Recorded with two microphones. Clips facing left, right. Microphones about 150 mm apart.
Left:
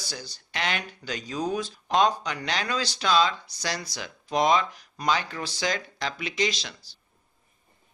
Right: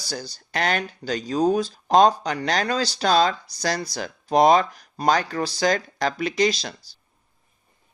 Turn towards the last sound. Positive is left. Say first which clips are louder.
# right 7 dB
turn(degrees=-35)  # may be behind; listen again after turning